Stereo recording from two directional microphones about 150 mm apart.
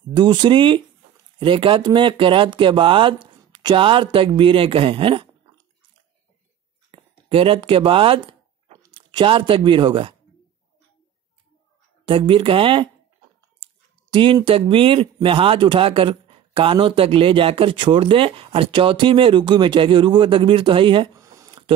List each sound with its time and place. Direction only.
0.1 s speech: 30° right (ahead or behind)
6.9 s speech: 40° right (ahead or behind)
12.1 s speech: 35° right (ahead or behind)
14.1 s speech: 35° right (ahead or behind)
21.1 s a sound: 20° right (ahead or behind)